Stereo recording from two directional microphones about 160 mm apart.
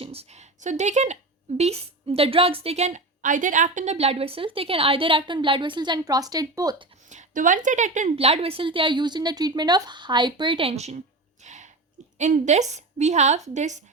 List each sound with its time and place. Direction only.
0.0 s speech: 40° right (ahead or behind)
7.1 s speech: 50° right (ahead or behind)
11.4 s a sound: 45° right (ahead or behind)
12.1 s a woman's voice: 45° right (ahead or behind)